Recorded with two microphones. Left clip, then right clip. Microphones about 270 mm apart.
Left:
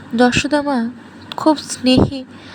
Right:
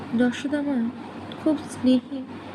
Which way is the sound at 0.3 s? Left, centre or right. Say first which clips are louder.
Left 10 dB; left.